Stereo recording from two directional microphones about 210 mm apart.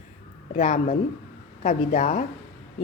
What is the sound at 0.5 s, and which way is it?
A woman's voice, 35° left (ahead or behind).